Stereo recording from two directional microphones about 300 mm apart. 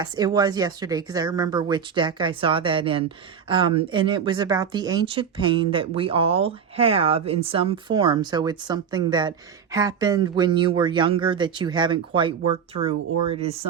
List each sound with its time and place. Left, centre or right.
0.0 s speech: centre